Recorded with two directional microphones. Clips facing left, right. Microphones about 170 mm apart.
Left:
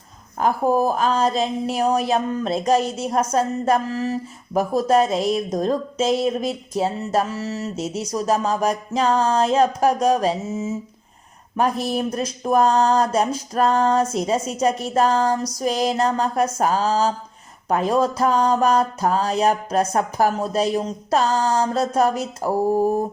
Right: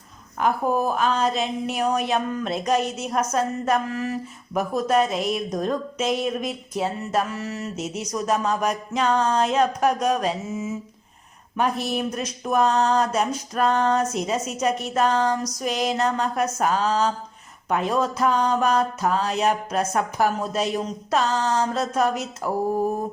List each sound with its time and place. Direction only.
0.3 s speech: 35° left (ahead or behind)
11.5 s speech: 35° left (ahead or behind)